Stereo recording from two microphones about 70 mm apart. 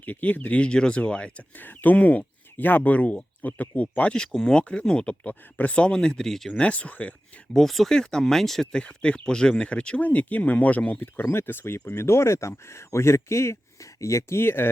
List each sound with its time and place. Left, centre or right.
0.0 s speech: left
1.5 s speech: left; by 6.5 s centre
6.6 s speech: centre
7.5 s speech: centre; by 14.7 s left